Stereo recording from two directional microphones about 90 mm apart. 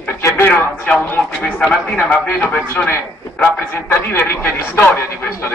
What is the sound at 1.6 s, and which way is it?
A man's voice, 10° left (ahead or behind).